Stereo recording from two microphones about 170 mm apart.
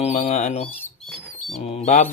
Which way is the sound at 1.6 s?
40° left (ahead or behind).